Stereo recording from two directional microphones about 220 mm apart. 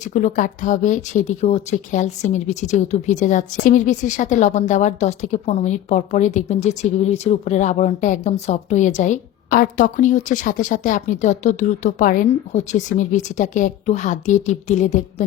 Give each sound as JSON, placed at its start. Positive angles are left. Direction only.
{"t": 0.1, "sound": "speech", "side_deg": 35}